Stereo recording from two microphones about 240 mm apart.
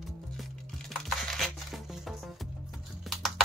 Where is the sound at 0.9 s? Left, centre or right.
Centre.